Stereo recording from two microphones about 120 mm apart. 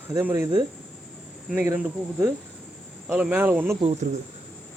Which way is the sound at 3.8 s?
65° right (ahead or behind).